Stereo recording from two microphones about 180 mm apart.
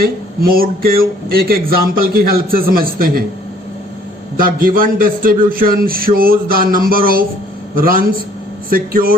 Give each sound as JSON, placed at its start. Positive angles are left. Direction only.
{"t": 0.0, "sound": "speech", "side_deg": -55}
{"t": 4.4, "sound": "a man's voice", "side_deg": -50}